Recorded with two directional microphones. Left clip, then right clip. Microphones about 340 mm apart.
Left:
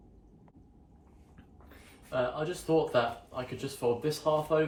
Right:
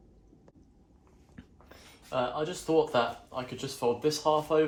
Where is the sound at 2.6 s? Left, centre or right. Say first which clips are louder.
Right 2 dB; centre.